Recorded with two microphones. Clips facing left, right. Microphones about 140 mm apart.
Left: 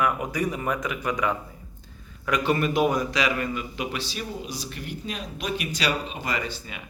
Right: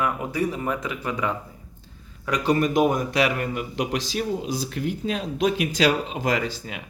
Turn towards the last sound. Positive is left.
turn(degrees=-90)